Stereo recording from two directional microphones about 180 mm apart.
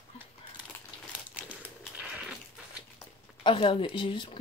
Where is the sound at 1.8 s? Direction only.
5° right (ahead or behind).